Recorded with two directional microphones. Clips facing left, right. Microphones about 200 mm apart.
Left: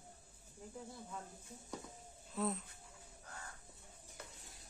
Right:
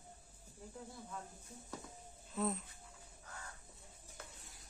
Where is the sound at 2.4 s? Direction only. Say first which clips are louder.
Right 1 dB; centre (ahead or behind).